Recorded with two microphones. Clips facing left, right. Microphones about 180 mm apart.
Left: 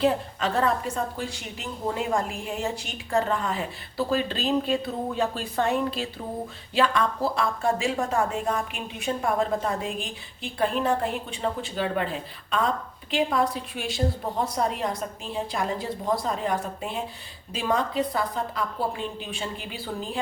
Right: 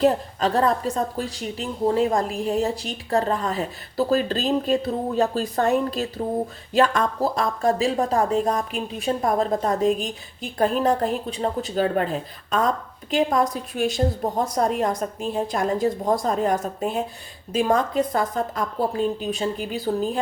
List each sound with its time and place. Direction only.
0.0 s a woman's voice: 40° right (ahead or behind)